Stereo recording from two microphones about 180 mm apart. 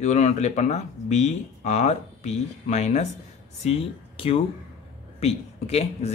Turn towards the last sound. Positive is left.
turn(degrees=35)  # may be behind; listen again after turning